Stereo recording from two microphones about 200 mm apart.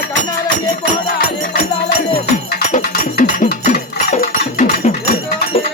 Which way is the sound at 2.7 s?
40° left (ahead or behind).